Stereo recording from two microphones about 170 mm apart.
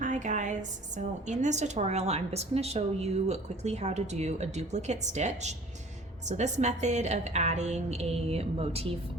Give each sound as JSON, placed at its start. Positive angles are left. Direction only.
{"t": 0.0, "sound": "a woman's voice", "side_deg": -45}